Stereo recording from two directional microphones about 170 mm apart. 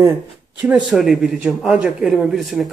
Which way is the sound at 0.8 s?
Centre (ahead or behind).